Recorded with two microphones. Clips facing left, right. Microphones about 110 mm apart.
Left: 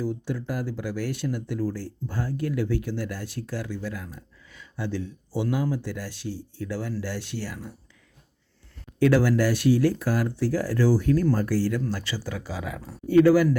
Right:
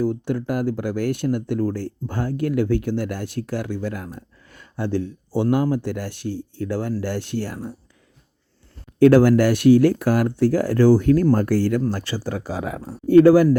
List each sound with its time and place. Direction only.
0.0 s speech: 55° right (ahead or behind)
9.0 s speech: 55° right (ahead or behind)